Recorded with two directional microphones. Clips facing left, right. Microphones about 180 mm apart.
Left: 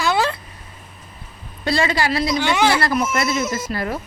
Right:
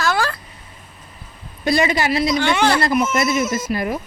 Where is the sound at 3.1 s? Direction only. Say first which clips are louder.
Right 2 dB; 20° right (ahead or behind).